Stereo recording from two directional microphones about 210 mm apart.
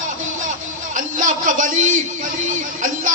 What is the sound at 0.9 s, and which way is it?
A man's voice, 40° right (ahead or behind).